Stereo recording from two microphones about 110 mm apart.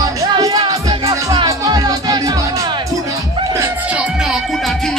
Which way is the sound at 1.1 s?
30° right (ahead or behind).